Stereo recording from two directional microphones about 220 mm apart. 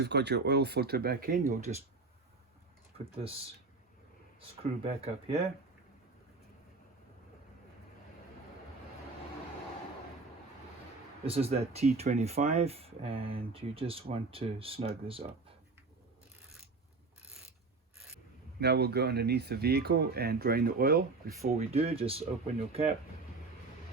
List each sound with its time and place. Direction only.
0.0 s speech: 50° right (ahead or behind)
4.4 s speech: 25° right (ahead or behind)
11.3 s speech: 25° right (ahead or behind)
18.6 s speech: 45° right (ahead or behind)
21.4 s speech: 25° right (ahead or behind)